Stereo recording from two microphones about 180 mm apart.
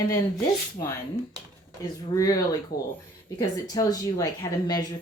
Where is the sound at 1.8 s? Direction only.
20° left (ahead or behind).